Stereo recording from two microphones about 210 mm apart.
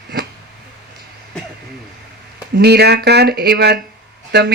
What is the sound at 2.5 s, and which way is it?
Speech, 50° right (ahead or behind).